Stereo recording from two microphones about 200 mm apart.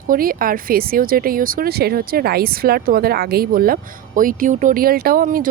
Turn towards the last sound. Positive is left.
turn(degrees=-45)  # may be behind; listen again after turning